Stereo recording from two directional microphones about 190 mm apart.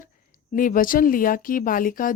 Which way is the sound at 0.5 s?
45° left (ahead or behind).